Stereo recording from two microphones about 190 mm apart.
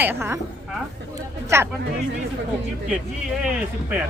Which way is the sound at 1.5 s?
15° right (ahead or behind).